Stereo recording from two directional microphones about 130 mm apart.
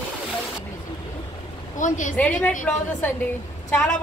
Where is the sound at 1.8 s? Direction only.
75° left (ahead or behind).